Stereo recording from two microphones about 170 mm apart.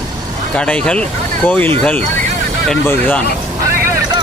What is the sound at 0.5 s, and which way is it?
Speech, 5° left (ahead or behind).